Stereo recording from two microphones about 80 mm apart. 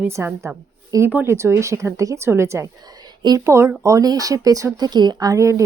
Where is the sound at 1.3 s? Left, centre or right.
Right.